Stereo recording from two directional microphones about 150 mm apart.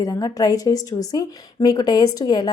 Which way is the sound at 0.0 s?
25° left (ahead or behind).